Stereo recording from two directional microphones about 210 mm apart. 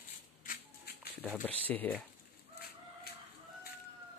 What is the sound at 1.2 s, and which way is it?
Speech, 5° left (ahead or behind).